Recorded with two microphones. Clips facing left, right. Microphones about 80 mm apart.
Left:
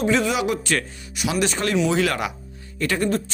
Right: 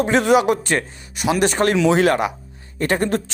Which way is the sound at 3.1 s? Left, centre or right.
Right.